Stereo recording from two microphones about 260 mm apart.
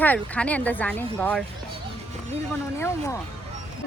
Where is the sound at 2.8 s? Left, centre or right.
Centre.